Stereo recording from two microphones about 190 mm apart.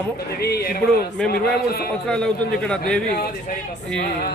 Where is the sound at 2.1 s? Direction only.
5° left (ahead or behind).